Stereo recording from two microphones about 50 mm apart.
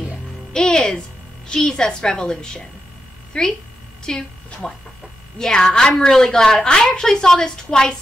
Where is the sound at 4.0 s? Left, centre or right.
Centre.